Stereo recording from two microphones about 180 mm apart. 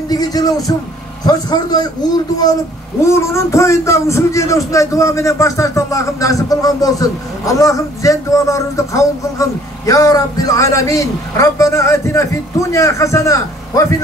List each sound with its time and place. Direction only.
0.1 s music: 20° left (ahead or behind)
1.2 s a man's voice: 20° left (ahead or behind)
3.1 s a man's voice: 15° left (ahead or behind)